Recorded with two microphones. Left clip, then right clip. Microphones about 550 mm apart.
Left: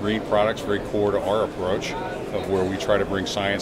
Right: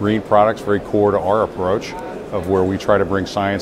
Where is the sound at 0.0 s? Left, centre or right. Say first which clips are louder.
Right 7 dB; right.